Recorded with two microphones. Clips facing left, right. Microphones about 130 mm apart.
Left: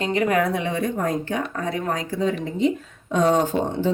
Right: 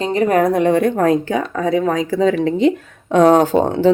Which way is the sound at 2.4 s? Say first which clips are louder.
Right 7 dB; 85° right.